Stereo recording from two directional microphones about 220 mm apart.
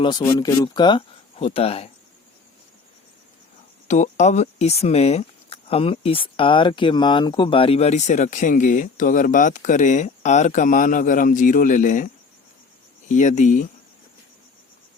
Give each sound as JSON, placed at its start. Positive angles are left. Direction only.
{"t": 0.0, "sound": "speech", "side_deg": 20}
{"t": 3.8, "sound": "speech", "side_deg": 35}
{"t": 13.1, "sound": "speech", "side_deg": 35}